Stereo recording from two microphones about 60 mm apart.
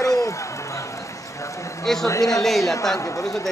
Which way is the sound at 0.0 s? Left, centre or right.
Left.